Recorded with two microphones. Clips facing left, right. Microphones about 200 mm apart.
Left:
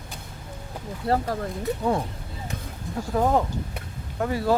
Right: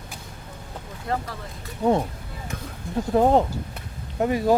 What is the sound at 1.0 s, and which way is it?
Speech, 40° left (ahead or behind).